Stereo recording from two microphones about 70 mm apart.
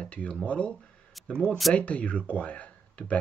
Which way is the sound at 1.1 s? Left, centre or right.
Centre.